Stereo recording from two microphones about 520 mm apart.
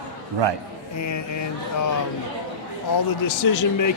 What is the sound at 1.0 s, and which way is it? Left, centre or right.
Speech, left.